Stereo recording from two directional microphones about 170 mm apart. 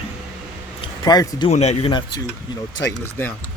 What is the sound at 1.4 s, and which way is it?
Speech, 40° left (ahead or behind).